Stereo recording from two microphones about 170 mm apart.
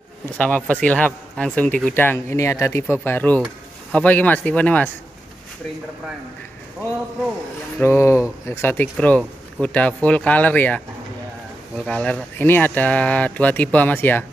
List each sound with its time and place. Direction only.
0.4 s speech: 10° left (ahead or behind)
7.8 s speech: 15° left (ahead or behind)